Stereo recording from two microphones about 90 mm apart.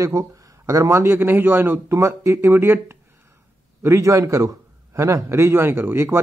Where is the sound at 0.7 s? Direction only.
35° right (ahead or behind).